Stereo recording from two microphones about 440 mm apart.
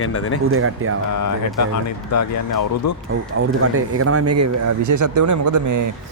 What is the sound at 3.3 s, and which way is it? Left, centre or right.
Speech, right.